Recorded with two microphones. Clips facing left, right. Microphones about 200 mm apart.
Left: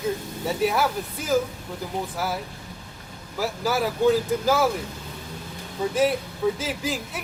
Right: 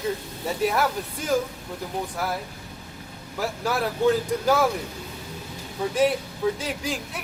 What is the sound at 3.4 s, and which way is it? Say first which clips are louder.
Speech: left 1 dB; centre (ahead or behind).